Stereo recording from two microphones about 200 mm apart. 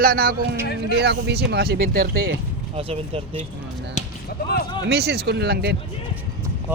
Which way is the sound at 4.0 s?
40° left (ahead or behind).